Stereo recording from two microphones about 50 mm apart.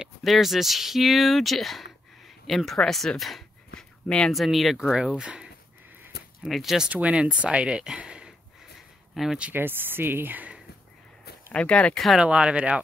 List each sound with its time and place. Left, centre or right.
0.2 s speech: centre
4.9 s speech: centre
6.5 s speech: centre
6.9 s speech: right
9.1 s speech: centre
9.5 s speech: right
11.5 s speech: left
11.9 s speech: centre
12.2 s speech: right